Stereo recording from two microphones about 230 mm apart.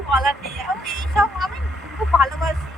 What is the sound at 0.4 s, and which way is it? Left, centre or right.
Music, left.